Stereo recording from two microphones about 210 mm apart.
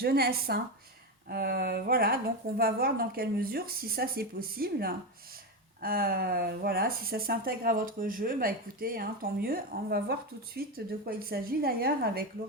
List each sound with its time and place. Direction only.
0.0 s speech: 45° right (ahead or behind)